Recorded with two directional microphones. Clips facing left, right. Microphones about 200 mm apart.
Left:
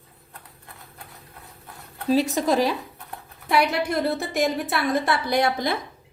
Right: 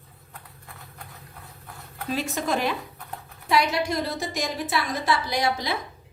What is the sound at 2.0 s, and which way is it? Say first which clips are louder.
Speech: left 7 dB; 35° left (ahead or behind).